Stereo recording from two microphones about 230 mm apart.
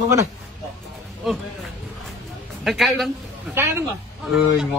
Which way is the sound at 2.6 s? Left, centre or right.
Centre.